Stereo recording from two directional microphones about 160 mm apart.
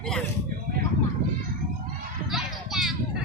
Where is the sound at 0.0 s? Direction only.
5° left (ahead or behind).